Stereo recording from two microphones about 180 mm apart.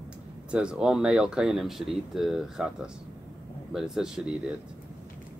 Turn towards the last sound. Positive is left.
turn(degrees=-5)  # may be behind; listen again after turning